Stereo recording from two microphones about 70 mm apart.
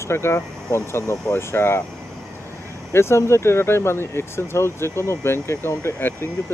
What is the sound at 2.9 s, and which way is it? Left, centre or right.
Speech, left.